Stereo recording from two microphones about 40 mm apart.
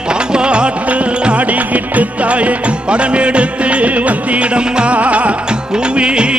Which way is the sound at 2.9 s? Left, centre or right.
Right.